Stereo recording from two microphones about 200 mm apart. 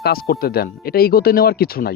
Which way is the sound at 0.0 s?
50° left (ahead or behind).